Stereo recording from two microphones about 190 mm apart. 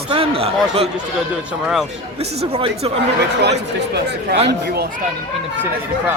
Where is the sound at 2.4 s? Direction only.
35° right (ahead or behind).